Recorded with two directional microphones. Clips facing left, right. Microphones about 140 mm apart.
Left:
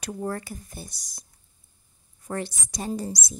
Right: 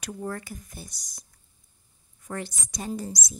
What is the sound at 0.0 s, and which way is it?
Speech, 35° left (ahead or behind).